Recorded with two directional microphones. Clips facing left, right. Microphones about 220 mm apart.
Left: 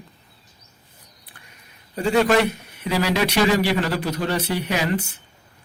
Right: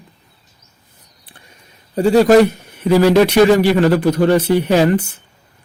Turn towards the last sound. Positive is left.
turn(degrees=-50)  # may be behind; listen again after turning